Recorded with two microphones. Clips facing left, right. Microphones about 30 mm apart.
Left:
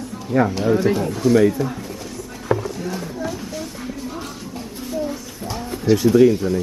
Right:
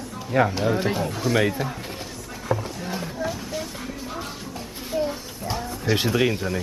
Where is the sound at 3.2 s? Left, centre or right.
Centre.